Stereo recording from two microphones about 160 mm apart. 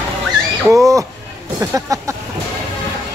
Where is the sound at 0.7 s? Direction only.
20° right (ahead or behind).